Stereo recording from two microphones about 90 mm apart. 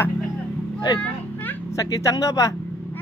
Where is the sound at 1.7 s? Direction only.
35° left (ahead or behind).